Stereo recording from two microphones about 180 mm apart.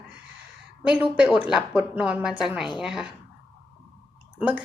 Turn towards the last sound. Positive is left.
turn(degrees=-10)  # may be behind; listen again after turning